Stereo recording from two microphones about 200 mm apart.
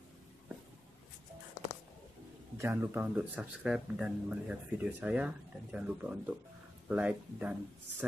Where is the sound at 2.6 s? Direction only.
10° right (ahead or behind).